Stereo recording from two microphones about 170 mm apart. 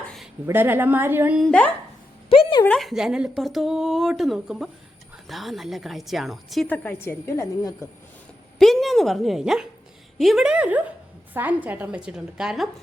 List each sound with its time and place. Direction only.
0.4 s a woman's voice: 10° right (ahead or behind)
1.4 s speech: 5° left (ahead or behind)
2.3 s speech: 30° left (ahead or behind)
2.6 s speech: centre (ahead or behind)
6.8 s a woman's voice: 15° left (ahead or behind)
8.5 s a woman's voice: centre (ahead or behind)